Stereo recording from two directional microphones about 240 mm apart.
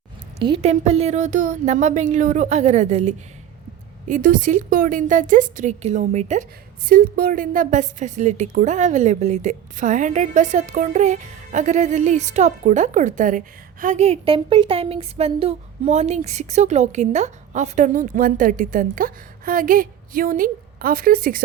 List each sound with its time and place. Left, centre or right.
0.4 s a woman's voice: right